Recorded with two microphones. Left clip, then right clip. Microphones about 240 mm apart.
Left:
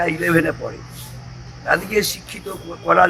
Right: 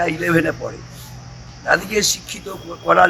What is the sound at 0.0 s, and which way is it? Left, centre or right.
A man's voice, centre.